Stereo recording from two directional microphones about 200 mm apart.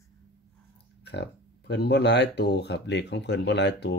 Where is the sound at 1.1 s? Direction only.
55° left (ahead or behind).